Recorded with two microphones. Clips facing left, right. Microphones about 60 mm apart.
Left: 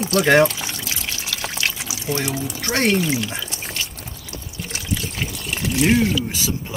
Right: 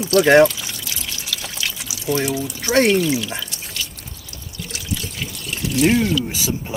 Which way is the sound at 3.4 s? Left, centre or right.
Left.